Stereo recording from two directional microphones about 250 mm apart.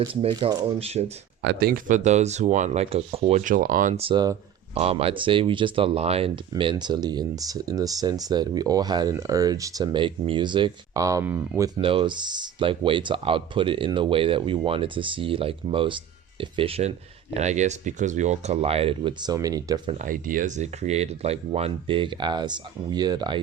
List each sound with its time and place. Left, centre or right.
0.0 s speech: centre
1.4 s speech: right; by 19.8 s centre
19.9 s speech: right